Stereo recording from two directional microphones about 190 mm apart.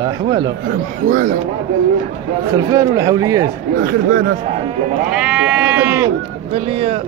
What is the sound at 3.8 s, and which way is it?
Speech, 50° right (ahead or behind).